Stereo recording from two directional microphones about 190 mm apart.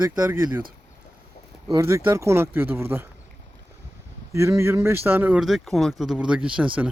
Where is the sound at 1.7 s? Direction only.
15° right (ahead or behind).